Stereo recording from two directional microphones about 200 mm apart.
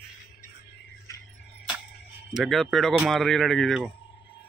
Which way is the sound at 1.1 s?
15° left (ahead or behind).